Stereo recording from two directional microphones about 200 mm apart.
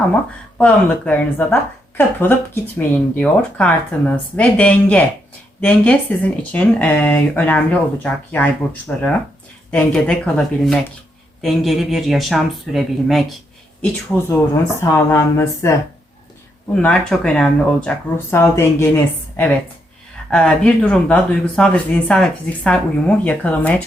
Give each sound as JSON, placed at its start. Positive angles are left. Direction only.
{"t": 0.6, "sound": "speech", "side_deg": 5}
{"t": 14.3, "sound": "speech", "side_deg": 15}
{"t": 16.7, "sound": "speech", "side_deg": 5}